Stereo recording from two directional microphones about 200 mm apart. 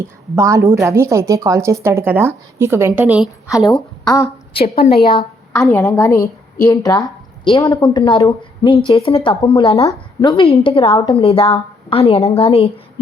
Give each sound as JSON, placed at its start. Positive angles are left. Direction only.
{"t": 0.3, "sound": "speech", "side_deg": -15}
{"t": 4.0, "sound": "a woman's voice", "side_deg": 20}
{"t": 4.8, "sound": "a woman's voice", "side_deg": 50}
{"t": 5.5, "sound": "a woman's voice", "side_deg": 15}